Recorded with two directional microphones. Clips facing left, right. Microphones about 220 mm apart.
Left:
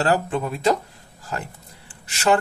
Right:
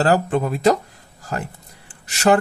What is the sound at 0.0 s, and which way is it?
Speech, 40° right (ahead or behind).